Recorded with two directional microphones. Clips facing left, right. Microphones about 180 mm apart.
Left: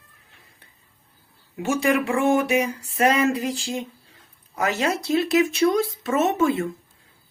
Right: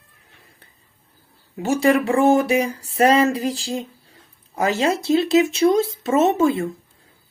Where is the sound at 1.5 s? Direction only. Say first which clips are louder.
Right 4 dB; 35° right (ahead or behind).